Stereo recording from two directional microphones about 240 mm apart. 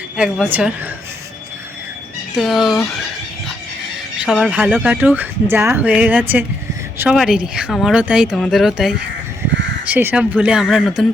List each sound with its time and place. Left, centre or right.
0.2 s speech: centre
2.3 s speech: centre
4.3 s speech: centre